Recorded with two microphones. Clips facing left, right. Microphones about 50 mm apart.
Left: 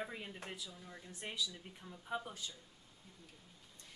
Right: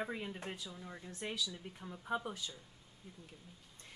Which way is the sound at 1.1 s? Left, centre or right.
Centre.